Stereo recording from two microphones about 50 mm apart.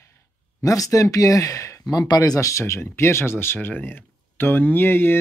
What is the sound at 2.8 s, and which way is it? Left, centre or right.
Speech, left.